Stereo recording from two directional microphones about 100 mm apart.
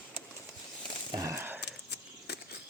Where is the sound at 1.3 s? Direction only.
20° right (ahead or behind).